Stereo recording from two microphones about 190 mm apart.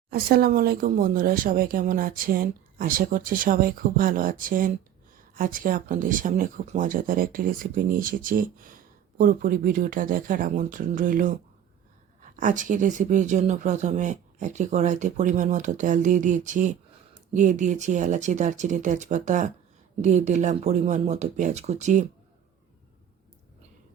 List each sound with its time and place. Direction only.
0.1 s speech: 55° right (ahead or behind)